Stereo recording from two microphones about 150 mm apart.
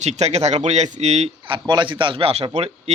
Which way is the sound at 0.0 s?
50° right (ahead or behind).